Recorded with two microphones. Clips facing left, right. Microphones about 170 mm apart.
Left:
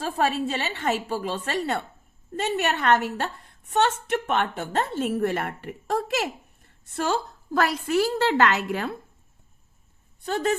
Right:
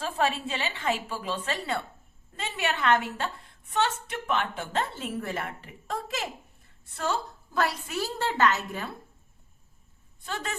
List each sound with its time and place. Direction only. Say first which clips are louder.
0.0 s a woman's voice: left 4 dB; 40° left (ahead or behind)
7.5 s a woman's voice: left 6 dB; 85° left
10.2 s a woman's voice: left 10 dB; 40° left (ahead or behind)